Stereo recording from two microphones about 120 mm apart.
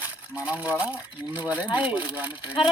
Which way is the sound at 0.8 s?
10° right (ahead or behind).